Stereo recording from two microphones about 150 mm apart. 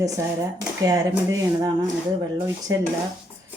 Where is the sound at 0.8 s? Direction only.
20° right (ahead or behind).